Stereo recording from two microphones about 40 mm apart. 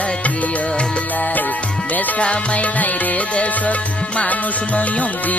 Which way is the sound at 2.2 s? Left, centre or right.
Left.